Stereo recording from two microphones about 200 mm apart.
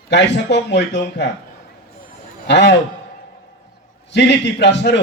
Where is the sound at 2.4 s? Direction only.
60° left (ahead or behind).